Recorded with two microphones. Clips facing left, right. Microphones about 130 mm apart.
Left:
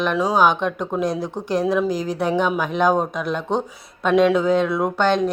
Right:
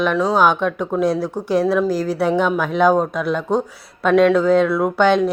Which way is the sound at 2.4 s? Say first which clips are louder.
Right 2 dB; 10° left (ahead or behind).